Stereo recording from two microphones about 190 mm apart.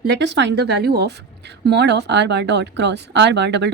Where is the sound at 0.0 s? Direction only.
65° right (ahead or behind).